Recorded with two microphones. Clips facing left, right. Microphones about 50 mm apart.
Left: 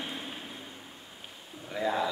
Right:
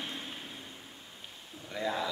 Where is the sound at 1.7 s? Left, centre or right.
Centre.